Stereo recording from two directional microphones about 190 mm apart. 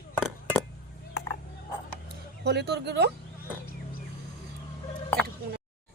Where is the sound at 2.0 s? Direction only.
60° right (ahead or behind).